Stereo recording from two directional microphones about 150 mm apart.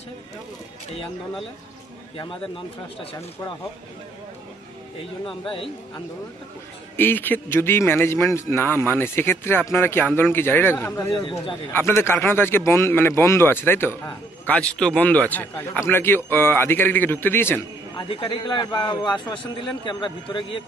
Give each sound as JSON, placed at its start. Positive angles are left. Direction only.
{"t": 2.1, "sound": "a man's voice", "side_deg": 35}
{"t": 7.0, "sound": "speech", "side_deg": 15}
{"t": 11.1, "sound": "a man's voice", "side_deg": 35}
{"t": 11.7, "sound": "speech", "side_deg": 15}
{"t": 17.9, "sound": "a man's voice", "side_deg": 35}